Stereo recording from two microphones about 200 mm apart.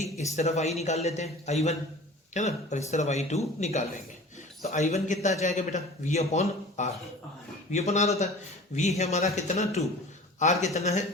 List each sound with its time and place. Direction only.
0.0 s a man's voice: 35° left (ahead or behind)